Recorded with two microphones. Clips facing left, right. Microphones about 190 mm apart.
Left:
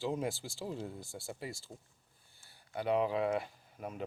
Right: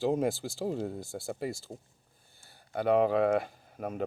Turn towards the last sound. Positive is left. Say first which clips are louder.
# right 7 dB
turn(degrees=-55)  # may be behind; listen again after turning